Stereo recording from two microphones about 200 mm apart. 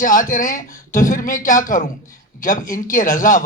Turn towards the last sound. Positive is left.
turn(degrees=40)  # may be behind; listen again after turning